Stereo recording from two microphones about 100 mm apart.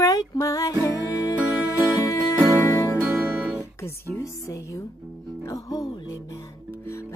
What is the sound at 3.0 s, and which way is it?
Music, 20° right (ahead or behind).